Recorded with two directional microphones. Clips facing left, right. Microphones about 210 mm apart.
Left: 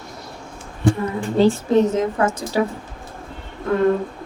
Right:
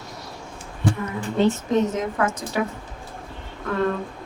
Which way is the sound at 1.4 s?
30° left (ahead or behind).